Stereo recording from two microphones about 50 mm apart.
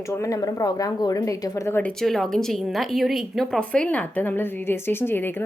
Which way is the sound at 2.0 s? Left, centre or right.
Centre.